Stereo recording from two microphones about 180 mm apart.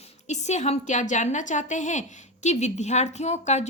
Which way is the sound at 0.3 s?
40° left (ahead or behind).